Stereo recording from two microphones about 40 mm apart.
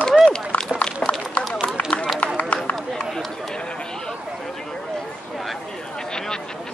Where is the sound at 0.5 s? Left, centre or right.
Left.